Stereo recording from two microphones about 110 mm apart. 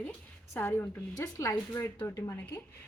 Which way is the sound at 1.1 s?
30° left (ahead or behind).